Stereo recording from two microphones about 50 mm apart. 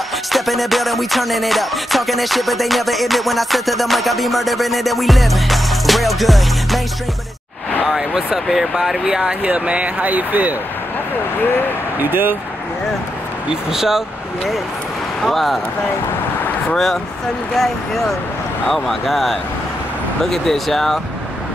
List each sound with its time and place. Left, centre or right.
0.3 s music: centre
7.8 s speech: centre
9.4 s speech: right
12.0 s speech: right
13.5 s speech: centre
15.2 s music: centre
16.7 s speech: centre
17.6 s music: centre
20.2 s speech: centre